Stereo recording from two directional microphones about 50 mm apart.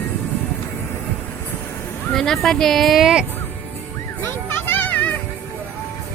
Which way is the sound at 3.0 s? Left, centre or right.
Centre.